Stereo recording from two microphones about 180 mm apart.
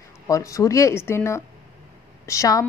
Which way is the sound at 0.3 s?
15° left (ahead or behind).